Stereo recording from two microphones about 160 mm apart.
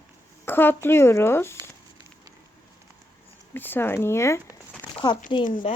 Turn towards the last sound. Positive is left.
turn(degrees=40)  # may be behind; listen again after turning